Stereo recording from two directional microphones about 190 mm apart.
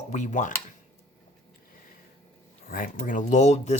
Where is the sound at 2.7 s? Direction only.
45° left (ahead or behind).